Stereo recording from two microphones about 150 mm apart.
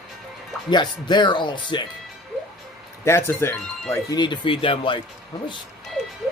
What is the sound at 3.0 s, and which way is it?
A man's voice, 15° left (ahead or behind).